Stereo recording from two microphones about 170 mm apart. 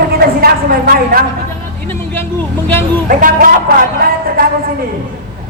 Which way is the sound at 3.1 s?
55° right (ahead or behind).